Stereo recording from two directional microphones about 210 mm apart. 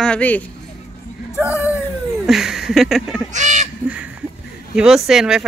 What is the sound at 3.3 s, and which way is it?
Goose, 35° right (ahead or behind).